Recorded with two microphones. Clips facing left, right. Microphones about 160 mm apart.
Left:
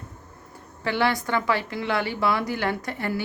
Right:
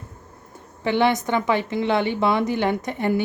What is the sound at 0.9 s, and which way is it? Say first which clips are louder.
Speech: right 4 dB; 20° right (ahead or behind).